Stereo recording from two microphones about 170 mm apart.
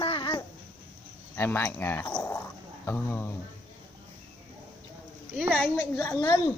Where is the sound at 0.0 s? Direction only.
30° left (ahead or behind).